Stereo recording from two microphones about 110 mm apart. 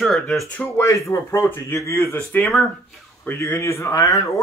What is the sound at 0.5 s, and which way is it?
Speech, 15° left (ahead or behind).